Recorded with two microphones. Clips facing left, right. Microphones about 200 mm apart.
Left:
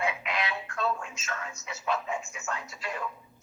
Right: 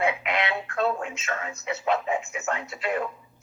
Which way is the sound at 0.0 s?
60° right (ahead or behind).